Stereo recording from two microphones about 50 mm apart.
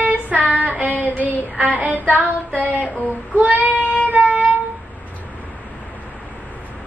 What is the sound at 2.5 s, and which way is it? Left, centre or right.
Child singing, right.